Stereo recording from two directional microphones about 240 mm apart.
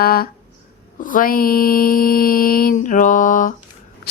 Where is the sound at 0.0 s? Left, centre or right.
Left.